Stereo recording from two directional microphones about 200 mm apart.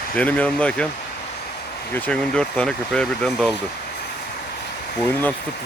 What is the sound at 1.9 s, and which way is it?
Speech, 5° left (ahead or behind).